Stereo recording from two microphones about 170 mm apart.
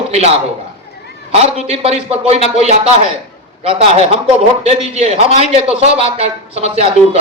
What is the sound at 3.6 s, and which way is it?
A man's voice, 35° right (ahead or behind).